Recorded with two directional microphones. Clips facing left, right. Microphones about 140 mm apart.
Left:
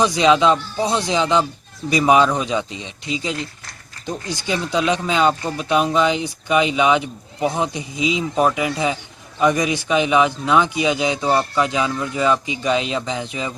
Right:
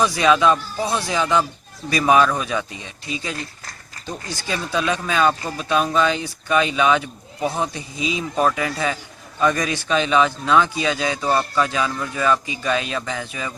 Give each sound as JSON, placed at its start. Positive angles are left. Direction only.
{"t": 0.0, "sound": "speech", "side_deg": 20}